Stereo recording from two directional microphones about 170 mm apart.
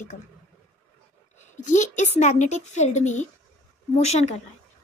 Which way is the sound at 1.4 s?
45° left (ahead or behind).